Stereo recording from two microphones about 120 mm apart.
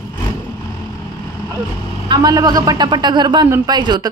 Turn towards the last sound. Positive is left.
turn(degrees=-35)  # may be behind; listen again after turning